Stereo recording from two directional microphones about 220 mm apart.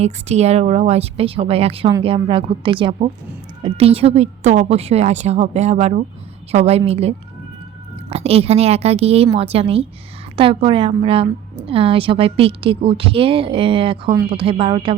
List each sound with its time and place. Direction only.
0.0 s speech: 30° right (ahead or behind)
8.1 s speech: 25° right (ahead or behind)